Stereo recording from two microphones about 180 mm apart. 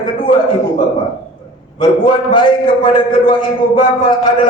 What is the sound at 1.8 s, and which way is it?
Speech, 25° left (ahead or behind).